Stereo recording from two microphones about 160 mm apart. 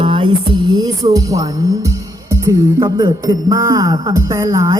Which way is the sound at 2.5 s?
25° right (ahead or behind).